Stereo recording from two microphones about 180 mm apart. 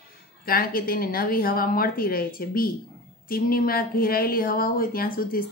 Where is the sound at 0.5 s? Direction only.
55° left (ahead or behind).